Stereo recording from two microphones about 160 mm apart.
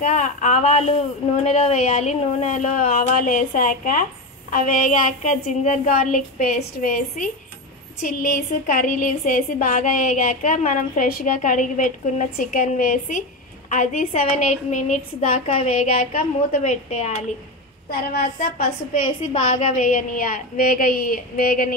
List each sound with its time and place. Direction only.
0.0 s a woman's voice: 50° left (ahead or behind)
18.1 s a woman's voice: 70° left (ahead or behind)
19.3 s a woman's voice: 50° left (ahead or behind)